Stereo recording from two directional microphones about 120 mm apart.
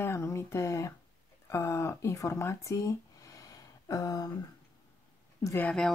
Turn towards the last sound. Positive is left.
turn(degrees=10)  # may be behind; listen again after turning